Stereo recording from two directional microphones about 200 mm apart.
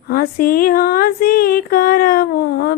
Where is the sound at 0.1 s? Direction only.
45° left (ahead or behind).